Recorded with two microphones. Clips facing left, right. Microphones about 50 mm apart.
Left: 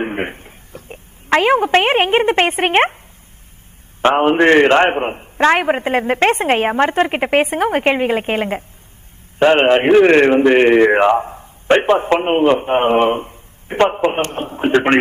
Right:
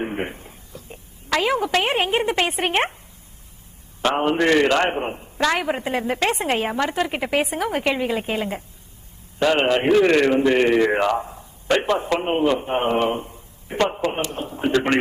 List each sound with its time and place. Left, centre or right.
0.0 s a woman's voice: left
4.0 s a man's voice: left